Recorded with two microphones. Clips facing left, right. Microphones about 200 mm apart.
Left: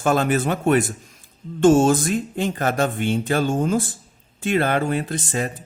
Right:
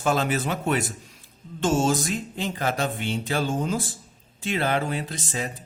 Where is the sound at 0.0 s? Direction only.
50° left (ahead or behind).